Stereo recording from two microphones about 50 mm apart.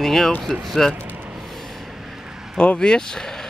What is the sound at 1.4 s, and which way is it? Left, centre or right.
Vehicle, centre.